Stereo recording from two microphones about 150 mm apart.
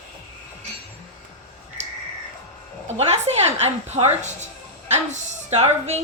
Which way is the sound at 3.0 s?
45° right (ahead or behind).